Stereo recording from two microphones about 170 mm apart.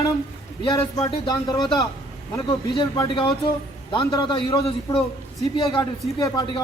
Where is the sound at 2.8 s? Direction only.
25° left (ahead or behind).